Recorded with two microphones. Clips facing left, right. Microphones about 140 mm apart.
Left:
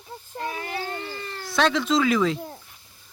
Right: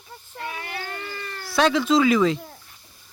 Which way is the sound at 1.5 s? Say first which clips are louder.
Right 3 dB; 5° right (ahead or behind).